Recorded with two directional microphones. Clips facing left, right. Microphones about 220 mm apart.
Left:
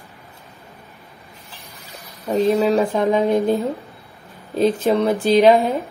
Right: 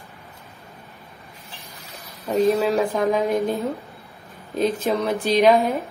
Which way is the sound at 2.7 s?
25° left (ahead or behind).